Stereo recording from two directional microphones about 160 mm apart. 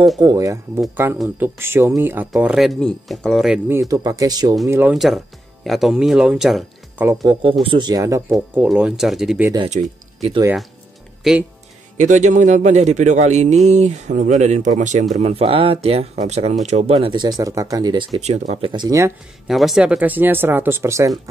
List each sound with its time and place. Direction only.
0.2 s speech: 25° right (ahead or behind)
2.3 s speech: 5° right (ahead or behind)
3.7 s speech: 20° right (ahead or behind)
4.9 s speech: centre (ahead or behind)
7.6 s speech: 30° right (ahead or behind)
8.3 s speech: 5° right (ahead or behind)
9.7 s speech: 45° right (ahead or behind)
11.3 s speech: centre (ahead or behind)
12.0 s a man's voice: 50° right (ahead or behind); by 18.2 s 25° right (ahead or behind)
18.2 s a man's voice: 45° right (ahead or behind)
18.7 s speech: 25° right (ahead or behind)
19.4 s speech: centre (ahead or behind); by 21.1 s 15° right (ahead or behind)